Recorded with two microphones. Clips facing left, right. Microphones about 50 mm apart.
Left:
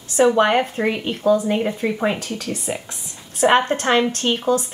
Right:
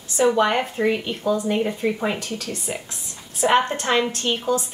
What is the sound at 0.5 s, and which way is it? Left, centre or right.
A woman's voice, centre.